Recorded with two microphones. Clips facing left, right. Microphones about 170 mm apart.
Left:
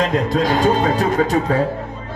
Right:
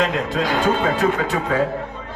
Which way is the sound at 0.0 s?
40° left (ahead or behind).